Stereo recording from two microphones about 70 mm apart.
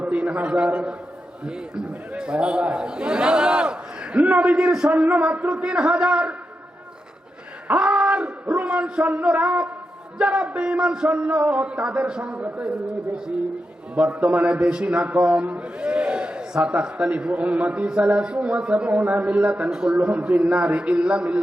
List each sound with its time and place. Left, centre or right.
0.0 s a man's voice: centre
4.9 s a man's voice: right
7.7 s a sound: centre
9.0 s a man's voice: right
13.9 s a man's voice: right
20.0 s a man's voice: right